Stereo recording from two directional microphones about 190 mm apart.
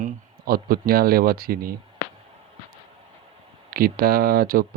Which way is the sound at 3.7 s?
50° right (ahead or behind).